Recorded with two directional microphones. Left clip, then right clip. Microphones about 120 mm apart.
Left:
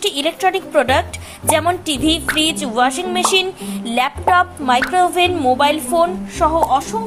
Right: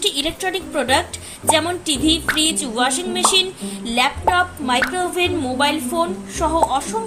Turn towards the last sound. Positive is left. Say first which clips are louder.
# left 3 dB
turn(degrees=35)  # may be behind; listen again after turning